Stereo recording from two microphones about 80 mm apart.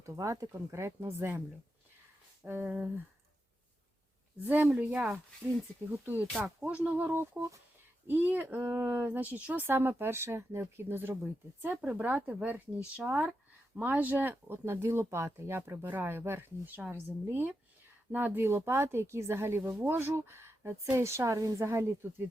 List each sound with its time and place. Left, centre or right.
0.0 s a woman's voice: right
2.5 s speech: right
4.4 s speech: centre
11.8 s a woman's voice: centre; by 22.1 s right